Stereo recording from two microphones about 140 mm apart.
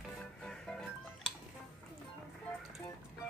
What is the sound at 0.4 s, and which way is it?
Music, 5° left (ahead or behind).